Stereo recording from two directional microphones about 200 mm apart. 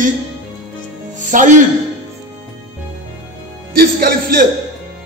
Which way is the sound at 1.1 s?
40° right (ahead or behind).